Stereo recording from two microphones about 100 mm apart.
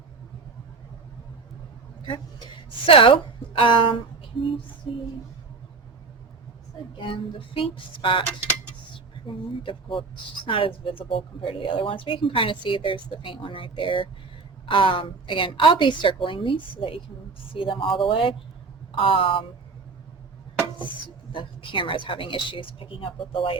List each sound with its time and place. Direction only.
2.8 s a woman's voice: 65° left (ahead or behind)
7.0 s a woman's voice: 65° left (ahead or behind)
9.2 s a woman's voice: 60° left (ahead or behind)
21.3 s a woman's voice: 55° left (ahead or behind)